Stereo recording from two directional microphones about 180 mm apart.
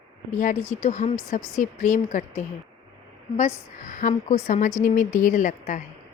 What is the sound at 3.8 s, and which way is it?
A woman's voice, 45° left (ahead or behind).